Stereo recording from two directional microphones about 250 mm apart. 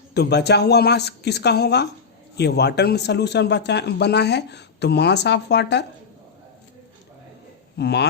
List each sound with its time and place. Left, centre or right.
0.1 s speech: left
7.8 s speech: left